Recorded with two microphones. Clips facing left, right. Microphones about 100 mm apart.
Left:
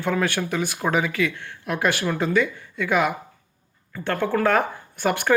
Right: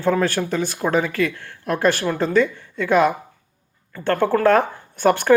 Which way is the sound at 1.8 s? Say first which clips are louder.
Right 3 dB; 30° right (ahead or behind).